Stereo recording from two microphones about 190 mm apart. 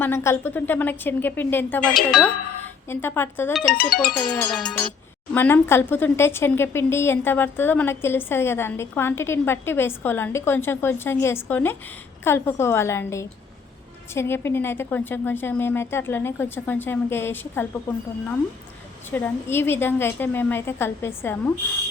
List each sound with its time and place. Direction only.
0.0 s speech: 10° left (ahead or behind)
2.0 s music: centre (ahead or behind)
2.9 s speech: 10° left (ahead or behind)
3.8 s speech: 50° left (ahead or behind)
4.0 s music: centre (ahead or behind)
5.3 s speech: 10° left (ahead or behind)
19.1 s speech: 10° left (ahead or behind)